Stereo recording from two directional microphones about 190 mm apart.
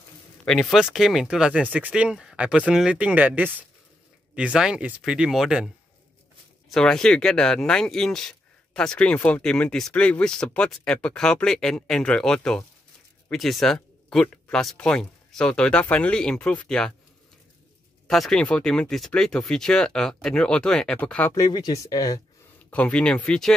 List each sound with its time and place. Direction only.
0.5 s speech: centre (ahead or behind)
6.7 s speech: 5° left (ahead or behind)
18.0 s speech: centre (ahead or behind)
21.3 s speech: 20° left (ahead or behind)
22.7 s speech: 5° left (ahead or behind)